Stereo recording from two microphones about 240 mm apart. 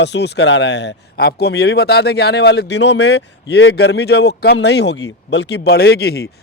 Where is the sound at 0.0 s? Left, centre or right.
Left.